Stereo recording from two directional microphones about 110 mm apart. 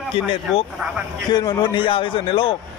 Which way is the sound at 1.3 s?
40° left (ahead or behind).